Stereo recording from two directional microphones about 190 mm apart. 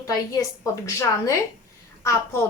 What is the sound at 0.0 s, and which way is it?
Speech, 20° left (ahead or behind).